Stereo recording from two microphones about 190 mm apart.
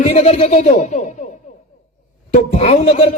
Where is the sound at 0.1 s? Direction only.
35° left (ahead or behind).